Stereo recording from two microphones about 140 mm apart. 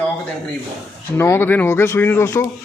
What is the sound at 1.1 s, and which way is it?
Speech, 15° left (ahead or behind).